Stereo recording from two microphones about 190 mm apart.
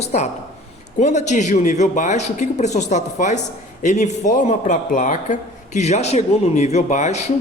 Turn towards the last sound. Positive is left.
turn(degrees=40)  # may be behind; listen again after turning